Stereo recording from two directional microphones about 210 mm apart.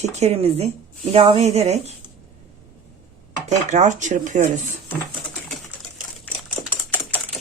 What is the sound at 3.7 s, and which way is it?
Speech, 35° right (ahead or behind).